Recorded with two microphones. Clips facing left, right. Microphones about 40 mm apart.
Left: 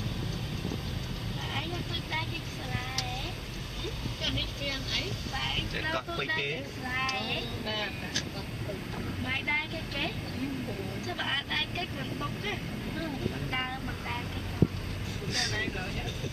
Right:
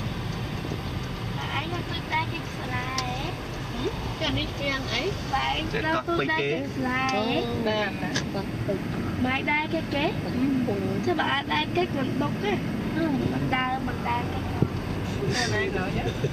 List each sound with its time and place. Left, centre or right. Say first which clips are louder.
4.2 s speech: right 6 dB; centre
9.2 s speech: right 6 dB; right
11.1 s speech: right 6 dB; centre
15.3 s speech: right 5 dB; centre